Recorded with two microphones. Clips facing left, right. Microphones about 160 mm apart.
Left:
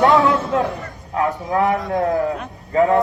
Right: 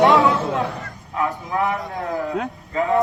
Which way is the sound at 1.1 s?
40° left (ahead or behind).